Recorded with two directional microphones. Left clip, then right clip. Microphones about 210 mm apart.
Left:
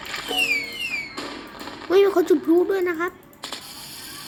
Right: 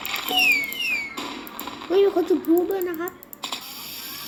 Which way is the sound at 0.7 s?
20° left (ahead or behind).